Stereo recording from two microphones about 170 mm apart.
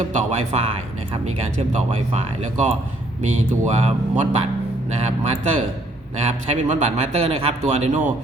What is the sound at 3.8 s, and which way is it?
A man's voice, 40° right (ahead or behind).